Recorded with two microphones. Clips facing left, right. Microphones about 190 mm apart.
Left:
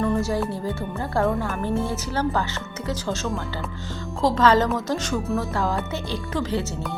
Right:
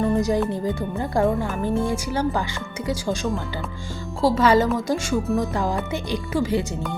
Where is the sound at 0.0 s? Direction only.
15° right (ahead or behind).